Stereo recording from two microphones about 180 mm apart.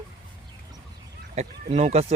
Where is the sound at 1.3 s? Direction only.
40° right (ahead or behind).